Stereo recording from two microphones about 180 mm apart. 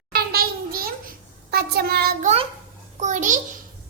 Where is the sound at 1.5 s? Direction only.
60° right (ahead or behind).